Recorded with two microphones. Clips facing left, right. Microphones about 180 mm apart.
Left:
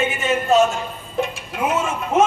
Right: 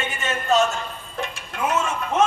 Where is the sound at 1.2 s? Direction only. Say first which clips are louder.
Left 5 dB; 5° left (ahead or behind).